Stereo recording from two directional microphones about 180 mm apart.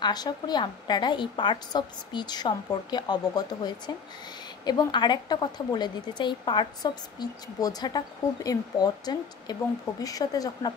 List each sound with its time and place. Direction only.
0.0 s a woman's voice: 20° left (ahead or behind)